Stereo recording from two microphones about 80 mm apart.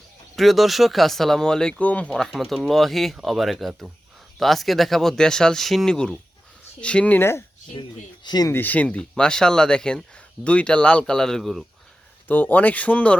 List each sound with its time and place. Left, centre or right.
0.3 s speech: centre
2.0 s speech: centre
7.2 s speech: left
7.7 s speech: left
8.5 s speech: left; by 11.6 s centre
12.3 s speech: left